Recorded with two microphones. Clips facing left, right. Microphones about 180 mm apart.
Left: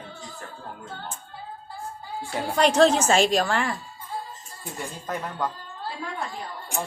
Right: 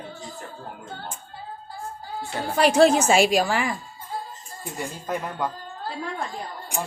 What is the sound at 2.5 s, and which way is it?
A woman's voice, 5° right (ahead or behind).